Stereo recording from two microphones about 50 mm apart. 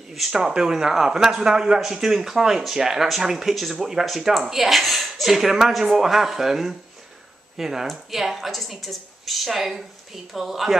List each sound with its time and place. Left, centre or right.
0.3 s a woman's voice: centre